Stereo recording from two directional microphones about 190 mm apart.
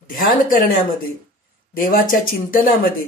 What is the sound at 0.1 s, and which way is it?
Speech, 50° left (ahead or behind).